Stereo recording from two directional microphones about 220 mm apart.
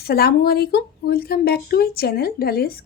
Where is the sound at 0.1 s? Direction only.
45° left (ahead or behind).